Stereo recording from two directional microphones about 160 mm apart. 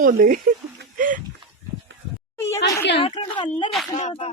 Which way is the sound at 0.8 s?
55° right (ahead or behind).